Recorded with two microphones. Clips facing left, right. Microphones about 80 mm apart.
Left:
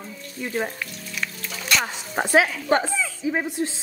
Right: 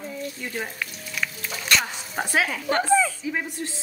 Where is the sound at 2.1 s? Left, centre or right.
Left.